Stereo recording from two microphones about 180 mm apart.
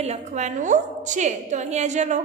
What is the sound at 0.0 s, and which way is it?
A woman's voice, 40° right (ahead or behind).